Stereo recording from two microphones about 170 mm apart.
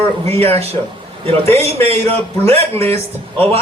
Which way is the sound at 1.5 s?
35° right (ahead or behind).